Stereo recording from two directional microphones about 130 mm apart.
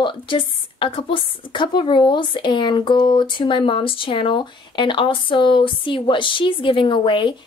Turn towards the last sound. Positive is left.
turn(degrees=40)  # may be behind; listen again after turning